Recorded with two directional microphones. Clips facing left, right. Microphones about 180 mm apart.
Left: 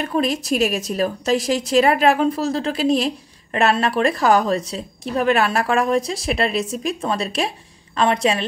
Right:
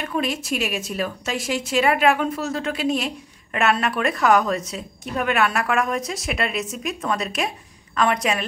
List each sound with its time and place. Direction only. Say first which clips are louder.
0.0 s a woman's voice: left 4 dB; 40° left (ahead or behind)